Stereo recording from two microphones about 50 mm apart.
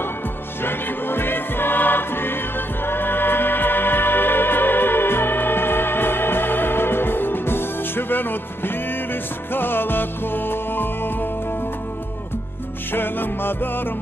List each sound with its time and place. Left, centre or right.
0.7 s music: left
12.9 s music: left